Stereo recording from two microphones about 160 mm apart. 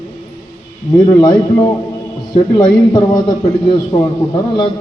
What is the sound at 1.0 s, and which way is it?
A man's voice, 25° left (ahead or behind).